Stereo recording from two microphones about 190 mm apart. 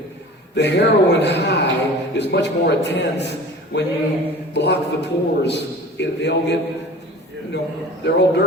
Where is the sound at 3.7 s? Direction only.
65° left (ahead or behind).